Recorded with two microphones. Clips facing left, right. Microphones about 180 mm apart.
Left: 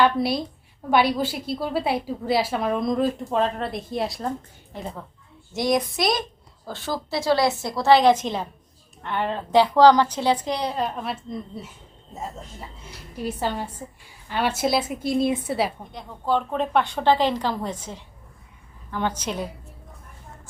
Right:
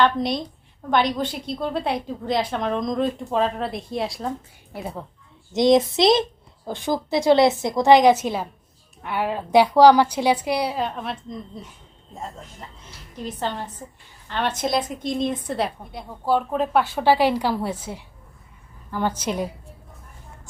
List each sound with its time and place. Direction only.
0.0 s a woman's voice: 5° left (ahead or behind)
5.5 s speech: 25° right (ahead or behind)
10.8 s a woman's voice: centre (ahead or behind)
13.1 s a woman's voice: 10° left (ahead or behind)
15.8 s speech: 10° right (ahead or behind)